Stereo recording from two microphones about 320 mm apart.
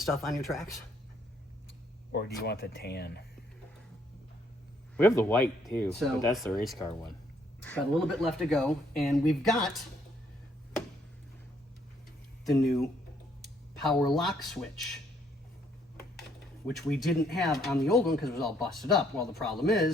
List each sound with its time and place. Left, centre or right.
0.0 s speech: centre
2.1 s speech: left
5.0 s speech: centre
13.8 s speech: centre
16.6 s speech: centre